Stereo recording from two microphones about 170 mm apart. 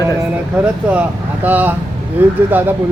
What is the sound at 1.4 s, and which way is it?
Speech, 10° right (ahead or behind).